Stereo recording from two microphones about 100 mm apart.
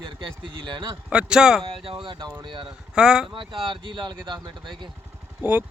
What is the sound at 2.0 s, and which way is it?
Speech, 55° right (ahead or behind).